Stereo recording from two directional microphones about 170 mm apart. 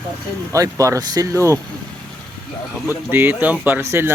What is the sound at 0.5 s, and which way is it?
Speech, 20° right (ahead or behind).